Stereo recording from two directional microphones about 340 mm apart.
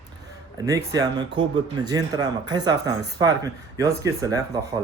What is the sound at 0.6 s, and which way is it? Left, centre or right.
Speech, centre.